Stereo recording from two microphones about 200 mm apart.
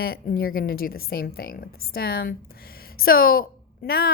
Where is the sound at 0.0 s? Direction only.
45° left (ahead or behind).